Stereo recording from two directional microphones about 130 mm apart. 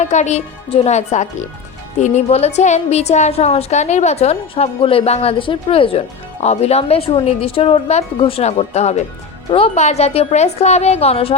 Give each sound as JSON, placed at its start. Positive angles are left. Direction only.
{"t": 0.0, "sound": "a woman's voice", "side_deg": 65}
{"t": 9.5, "sound": "speech", "side_deg": 50}